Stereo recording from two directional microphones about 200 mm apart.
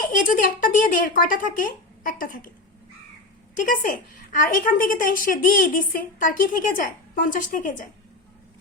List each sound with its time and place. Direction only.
0.2 s a woman's voice: 45° left (ahead or behind)
3.7 s a woman's voice: 40° left (ahead or behind)